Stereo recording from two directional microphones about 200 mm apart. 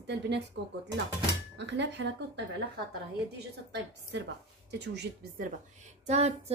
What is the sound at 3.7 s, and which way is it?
A woman's voice, 60° right (ahead or behind).